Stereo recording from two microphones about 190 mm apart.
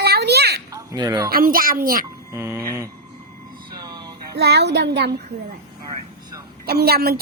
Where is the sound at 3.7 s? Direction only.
20° right (ahead or behind).